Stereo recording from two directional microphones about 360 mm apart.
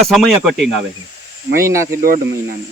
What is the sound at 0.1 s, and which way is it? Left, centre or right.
Speech, centre.